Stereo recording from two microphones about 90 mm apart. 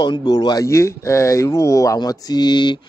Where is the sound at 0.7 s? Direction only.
30° left (ahead or behind).